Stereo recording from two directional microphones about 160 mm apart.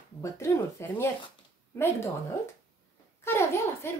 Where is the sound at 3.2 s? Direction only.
15° left (ahead or behind).